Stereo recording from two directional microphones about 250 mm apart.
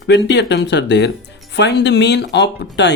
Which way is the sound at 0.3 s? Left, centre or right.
Left.